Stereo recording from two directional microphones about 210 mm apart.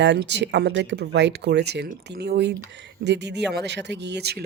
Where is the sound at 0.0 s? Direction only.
55° right (ahead or behind).